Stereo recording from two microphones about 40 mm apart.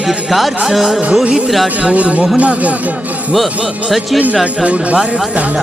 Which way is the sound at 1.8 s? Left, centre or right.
Right.